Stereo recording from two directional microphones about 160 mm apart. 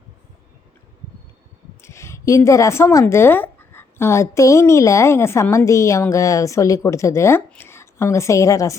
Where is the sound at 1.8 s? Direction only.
15° left (ahead or behind).